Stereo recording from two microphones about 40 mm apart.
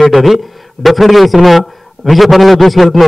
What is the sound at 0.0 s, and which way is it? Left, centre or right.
A man's voice, centre.